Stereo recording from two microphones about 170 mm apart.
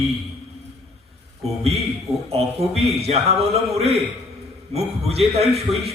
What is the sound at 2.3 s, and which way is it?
A man's voice, 35° right (ahead or behind).